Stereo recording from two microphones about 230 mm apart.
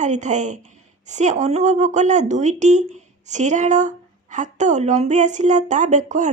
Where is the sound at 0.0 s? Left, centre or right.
Right.